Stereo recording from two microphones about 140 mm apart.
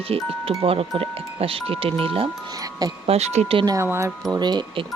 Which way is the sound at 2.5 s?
25° right (ahead or behind).